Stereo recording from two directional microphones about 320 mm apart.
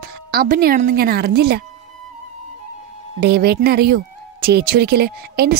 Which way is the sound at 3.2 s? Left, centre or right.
Right.